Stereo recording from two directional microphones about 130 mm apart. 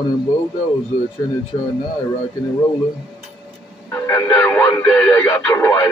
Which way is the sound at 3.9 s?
15° left (ahead or behind).